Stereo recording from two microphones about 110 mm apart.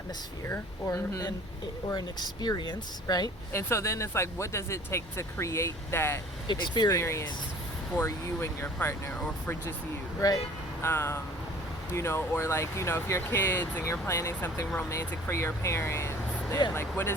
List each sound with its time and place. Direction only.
0.4 s speech: 20° left (ahead or behind)
1.9 s speech: 40° left (ahead or behind)
3.5 s speech: 25° left (ahead or behind)
6.5 s speech: 40° left (ahead or behind)
6.9 s speech: 25° left (ahead or behind)
10.2 s speech: 35° left (ahead or behind)
10.8 s speech: 25° left (ahead or behind)